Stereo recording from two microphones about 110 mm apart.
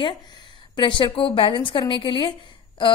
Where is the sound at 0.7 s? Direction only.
50° left (ahead or behind).